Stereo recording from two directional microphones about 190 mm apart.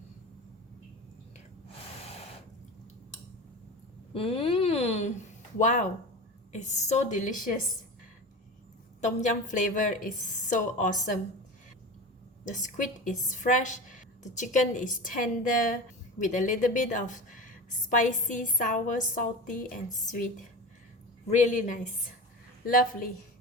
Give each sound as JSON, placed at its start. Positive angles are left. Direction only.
{"t": 4.1, "sound": "a sound", "side_deg": 30}
{"t": 5.5, "sound": "a woman's voice", "side_deg": 40}
{"t": 9.0, "sound": "a woman's voice", "side_deg": 40}
{"t": 12.5, "sound": "a woman's voice", "side_deg": 40}